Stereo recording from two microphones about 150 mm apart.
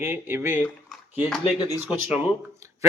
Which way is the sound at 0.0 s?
15° right (ahead or behind).